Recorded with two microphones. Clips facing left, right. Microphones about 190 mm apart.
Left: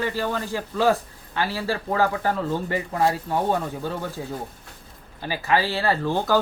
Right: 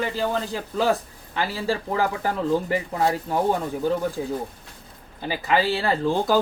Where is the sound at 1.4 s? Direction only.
15° right (ahead or behind).